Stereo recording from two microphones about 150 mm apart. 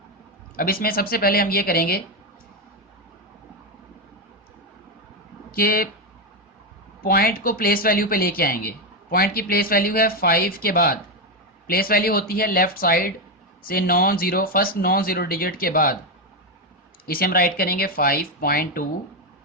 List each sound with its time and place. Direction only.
0.5 s speech: 75° left (ahead or behind)
5.5 s speech: 75° left (ahead or behind)
7.0 s speech: 85° left
17.1 s speech: 80° left